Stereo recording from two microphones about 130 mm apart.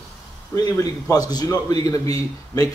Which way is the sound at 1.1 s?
30° left (ahead or behind).